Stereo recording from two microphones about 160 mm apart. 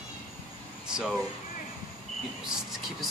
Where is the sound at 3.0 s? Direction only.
Centre (ahead or behind).